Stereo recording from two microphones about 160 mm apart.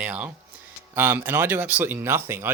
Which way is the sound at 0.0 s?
10° right (ahead or behind).